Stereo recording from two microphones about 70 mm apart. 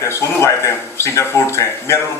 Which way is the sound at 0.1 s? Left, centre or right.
Left.